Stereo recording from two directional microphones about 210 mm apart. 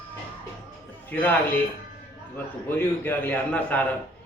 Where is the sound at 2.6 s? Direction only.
10° left (ahead or behind).